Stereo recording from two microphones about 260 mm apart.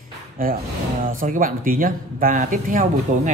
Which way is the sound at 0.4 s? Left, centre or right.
Right.